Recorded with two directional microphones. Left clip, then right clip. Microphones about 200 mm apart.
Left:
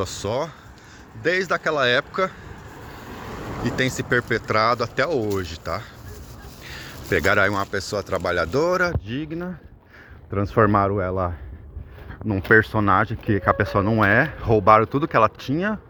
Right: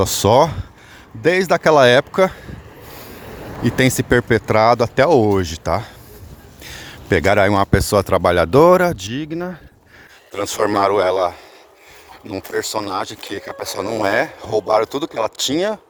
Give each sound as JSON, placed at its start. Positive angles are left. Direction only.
{"t": 0.0, "sound": "speech", "side_deg": -45}
{"t": 3.6, "sound": "speech", "side_deg": -40}
{"t": 12.5, "sound": "speech", "side_deg": -30}